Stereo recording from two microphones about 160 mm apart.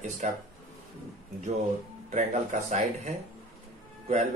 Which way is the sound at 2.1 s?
45° right (ahead or behind).